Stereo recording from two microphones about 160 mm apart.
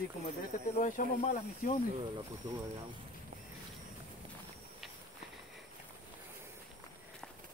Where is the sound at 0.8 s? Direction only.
55° left (ahead or behind).